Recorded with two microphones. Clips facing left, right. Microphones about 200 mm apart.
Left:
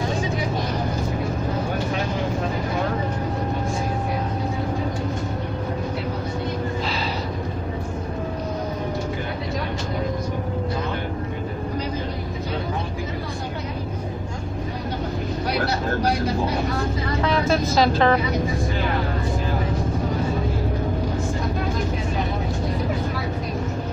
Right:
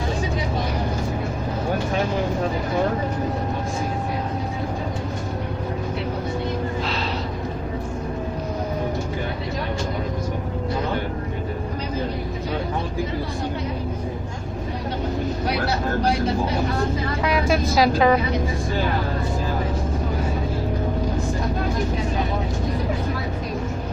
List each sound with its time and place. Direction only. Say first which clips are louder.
17.2 s vehicle: left 1 dB; 10° right (ahead or behind)